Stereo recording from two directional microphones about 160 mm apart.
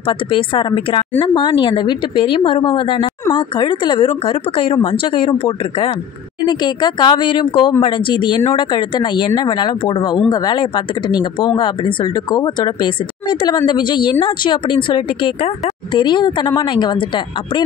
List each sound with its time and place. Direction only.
0.0 s a woman's voice: 30° left (ahead or behind)